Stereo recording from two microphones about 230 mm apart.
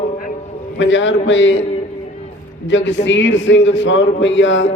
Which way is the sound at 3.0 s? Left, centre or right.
Left.